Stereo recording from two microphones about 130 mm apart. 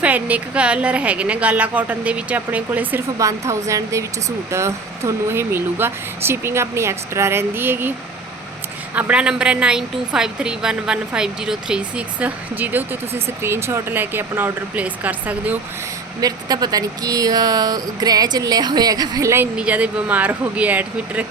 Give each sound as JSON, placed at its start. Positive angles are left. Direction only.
{"t": 0.0, "sound": "a woman's voice", "side_deg": -10}
{"t": 3.2, "sound": "speech", "side_deg": -25}
{"t": 9.0, "sound": "a woman's voice", "side_deg": -10}
{"t": 16.2, "sound": "speech", "side_deg": -30}
{"t": 19.5, "sound": "a woman's voice", "side_deg": -10}